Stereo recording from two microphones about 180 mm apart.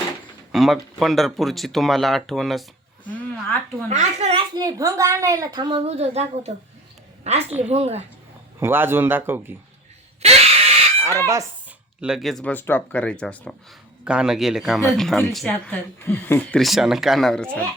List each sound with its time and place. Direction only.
0.5 s speech: centre (ahead or behind)
3.8 s a child's voice: 40° right (ahead or behind)
4.6 s a woman's voice: 20° right (ahead or behind)
5.8 s a child's voice: 35° right (ahead or behind)
8.5 s a man's voice: 10° right (ahead or behind)
10.2 s fowl: 35° right (ahead or behind)
11.0 s fowl: 15° right (ahead or behind)
11.9 s speech: 5° right (ahead or behind)
14.0 s speech: 5° right (ahead or behind)